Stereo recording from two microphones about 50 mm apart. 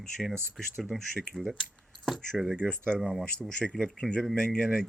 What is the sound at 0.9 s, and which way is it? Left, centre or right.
Speech, centre.